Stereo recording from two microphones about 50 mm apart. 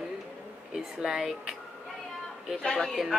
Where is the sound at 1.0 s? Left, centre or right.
Centre.